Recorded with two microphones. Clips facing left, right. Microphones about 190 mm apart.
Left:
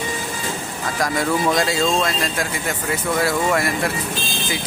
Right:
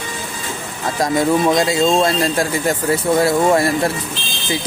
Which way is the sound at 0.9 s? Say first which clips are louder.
Right 5 dB; 25° right (ahead or behind).